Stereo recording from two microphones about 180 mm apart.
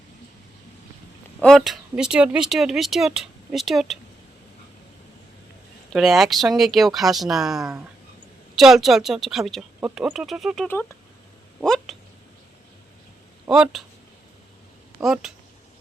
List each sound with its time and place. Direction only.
1.4 s speech: centre (ahead or behind)
5.9 s speech: centre (ahead or behind)
7.5 s speech: 15° right (ahead or behind)
8.5 s speech: centre (ahead or behind)
10.7 s speech: 10° left (ahead or behind)
11.6 s speech: centre (ahead or behind)
13.4 s speech: 5° right (ahead or behind)
15.0 s speech: 5° right (ahead or behind)